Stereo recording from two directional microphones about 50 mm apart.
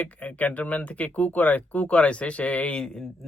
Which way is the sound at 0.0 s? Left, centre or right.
Left.